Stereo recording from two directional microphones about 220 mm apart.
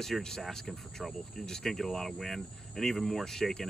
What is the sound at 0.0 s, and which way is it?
Speech, centre (ahead or behind).